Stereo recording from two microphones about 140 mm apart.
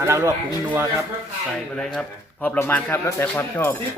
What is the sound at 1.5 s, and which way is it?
A man's voice, 5° left (ahead or behind).